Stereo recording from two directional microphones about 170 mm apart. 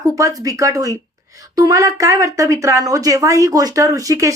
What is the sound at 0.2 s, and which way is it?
A woman's voice, 20° right (ahead or behind).